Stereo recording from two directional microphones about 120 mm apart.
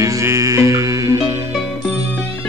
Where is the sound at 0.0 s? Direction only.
25° right (ahead or behind).